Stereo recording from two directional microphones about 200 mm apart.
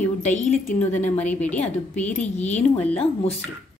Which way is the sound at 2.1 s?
35° left (ahead or behind).